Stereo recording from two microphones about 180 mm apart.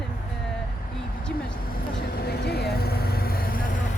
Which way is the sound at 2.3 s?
60° left (ahead or behind).